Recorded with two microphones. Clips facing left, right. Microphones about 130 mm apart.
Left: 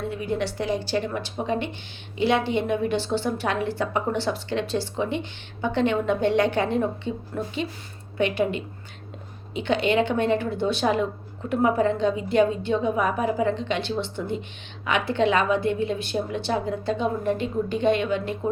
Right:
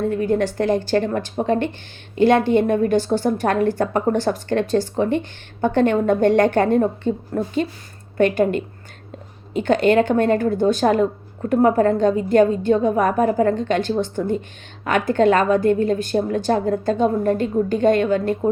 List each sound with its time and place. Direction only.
0.1 s a woman's voice: 45° right (ahead or behind)